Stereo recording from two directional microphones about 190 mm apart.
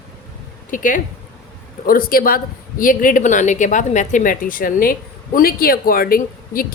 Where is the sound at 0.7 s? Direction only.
45° left (ahead or behind).